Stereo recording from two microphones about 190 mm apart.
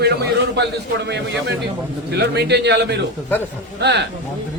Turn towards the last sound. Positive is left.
turn(degrees=-60)  # may be behind; listen again after turning